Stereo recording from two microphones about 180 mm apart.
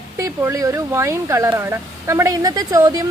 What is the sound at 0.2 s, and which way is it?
Speech, 15° right (ahead or behind).